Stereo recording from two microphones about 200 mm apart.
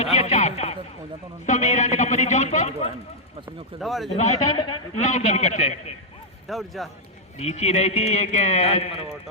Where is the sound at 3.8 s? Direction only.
Centre (ahead or behind).